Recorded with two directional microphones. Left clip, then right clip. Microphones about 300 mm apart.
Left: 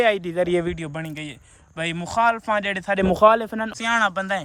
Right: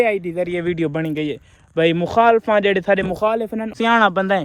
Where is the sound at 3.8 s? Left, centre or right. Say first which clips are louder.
Right 6 dB; centre.